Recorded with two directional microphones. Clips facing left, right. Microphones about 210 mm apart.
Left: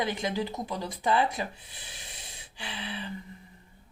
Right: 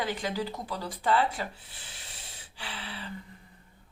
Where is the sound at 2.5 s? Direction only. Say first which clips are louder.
Left 3 dB; 20° left (ahead or behind).